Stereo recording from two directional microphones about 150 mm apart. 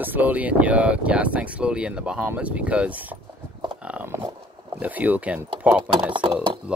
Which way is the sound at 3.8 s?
10° right (ahead or behind).